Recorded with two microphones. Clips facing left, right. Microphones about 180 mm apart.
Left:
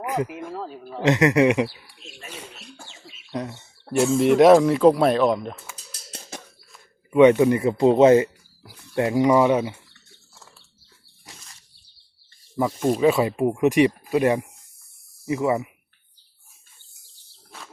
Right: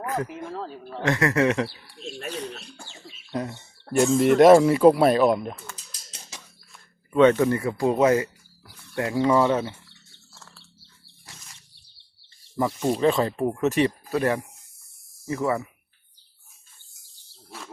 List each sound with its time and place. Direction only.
0.0 s a sound: 15° left (ahead or behind)
0.3 s a sound: 5° left (ahead or behind)
1.0 s speech: 20° left (ahead or behind)
2.3 s bird: 5° left (ahead or behind)
3.8 s speech: 5° left (ahead or behind)
6.3 s a sound: 55° left (ahead or behind)
7.1 s speech: 15° left (ahead or behind)
10.3 s bird: 15° left (ahead or behind)
12.8 s speech: 5° left (ahead or behind)